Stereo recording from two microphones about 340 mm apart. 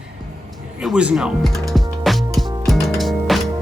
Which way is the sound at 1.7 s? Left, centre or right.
Centre.